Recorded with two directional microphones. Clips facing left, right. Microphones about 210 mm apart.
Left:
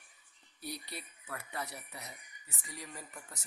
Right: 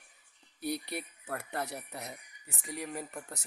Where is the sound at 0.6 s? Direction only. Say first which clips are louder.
Right 8 dB; 60° right (ahead or behind).